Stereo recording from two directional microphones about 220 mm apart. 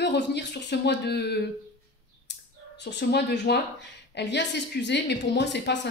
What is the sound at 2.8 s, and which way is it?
A woman's voice, 50° left (ahead or behind).